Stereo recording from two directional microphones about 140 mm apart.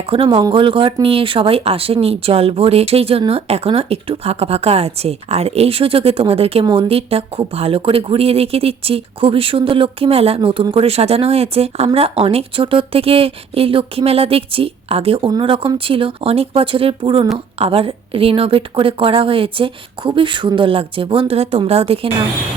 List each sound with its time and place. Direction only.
0.1 s a woman's voice: 40° right (ahead or behind)